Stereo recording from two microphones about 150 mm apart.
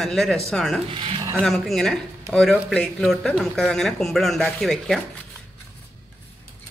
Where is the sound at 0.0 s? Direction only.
Centre (ahead or behind).